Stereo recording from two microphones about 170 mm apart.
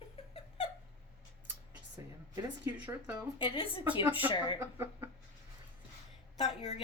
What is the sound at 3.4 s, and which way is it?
Speech, 30° left (ahead or behind).